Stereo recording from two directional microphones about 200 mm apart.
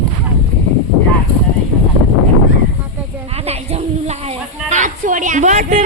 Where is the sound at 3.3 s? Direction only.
30° right (ahead or behind).